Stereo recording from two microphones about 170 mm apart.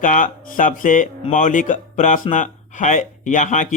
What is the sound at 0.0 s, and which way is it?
Speech, 50° left (ahead or behind).